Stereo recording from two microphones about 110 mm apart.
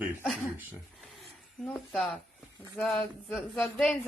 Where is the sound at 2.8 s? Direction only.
Centre (ahead or behind).